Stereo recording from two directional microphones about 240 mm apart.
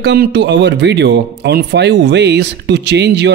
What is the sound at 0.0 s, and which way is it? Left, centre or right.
A man's voice, right.